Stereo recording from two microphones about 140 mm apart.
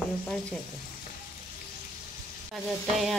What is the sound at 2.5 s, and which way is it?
Speech, centre (ahead or behind).